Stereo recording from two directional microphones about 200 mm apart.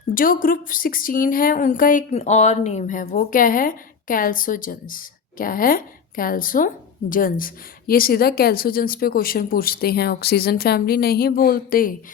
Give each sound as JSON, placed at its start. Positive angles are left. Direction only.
{"t": 0.1, "sound": "a woman's voice", "side_deg": 45}